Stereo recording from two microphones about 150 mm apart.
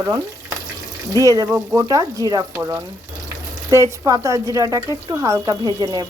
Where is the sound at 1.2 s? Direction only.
20° right (ahead or behind).